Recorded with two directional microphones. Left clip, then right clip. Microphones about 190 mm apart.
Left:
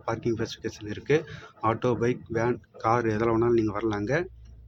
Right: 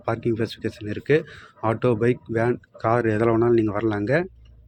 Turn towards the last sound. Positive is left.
turn(degrees=-25)  # may be behind; listen again after turning